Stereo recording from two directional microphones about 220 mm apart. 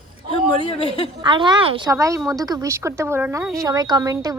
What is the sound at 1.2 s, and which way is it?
A woman's voice, 20° right (ahead or behind).